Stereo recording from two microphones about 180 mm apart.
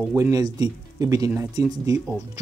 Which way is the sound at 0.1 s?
15° right (ahead or behind).